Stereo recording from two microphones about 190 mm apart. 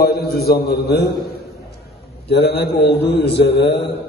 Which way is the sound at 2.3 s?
60° left (ahead or behind).